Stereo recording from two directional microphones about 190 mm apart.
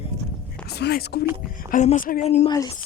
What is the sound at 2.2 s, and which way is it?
Speech, 30° left (ahead or behind).